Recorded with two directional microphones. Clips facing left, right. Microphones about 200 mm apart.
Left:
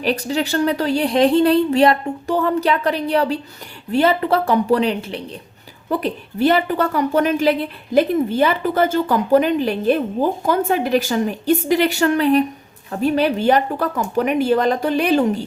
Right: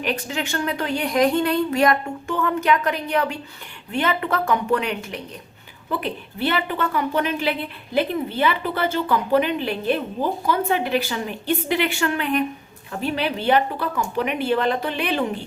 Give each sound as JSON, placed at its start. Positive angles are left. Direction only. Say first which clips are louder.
{"t": 0.0, "sound": "a woman's voice", "louder": "left 6 dB", "side_deg": 35}